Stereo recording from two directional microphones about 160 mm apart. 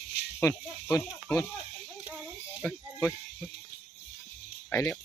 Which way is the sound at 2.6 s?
10° left (ahead or behind).